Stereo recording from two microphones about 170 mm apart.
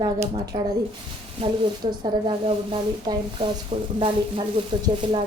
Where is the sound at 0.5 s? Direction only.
40° right (ahead or behind).